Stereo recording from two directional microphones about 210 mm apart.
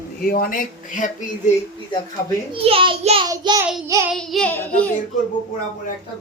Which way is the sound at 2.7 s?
25° right (ahead or behind).